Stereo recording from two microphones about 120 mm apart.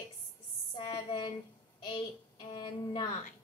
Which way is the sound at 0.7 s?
40° left (ahead or behind).